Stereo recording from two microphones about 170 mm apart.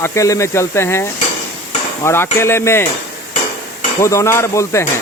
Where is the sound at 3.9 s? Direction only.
15° left (ahead or behind).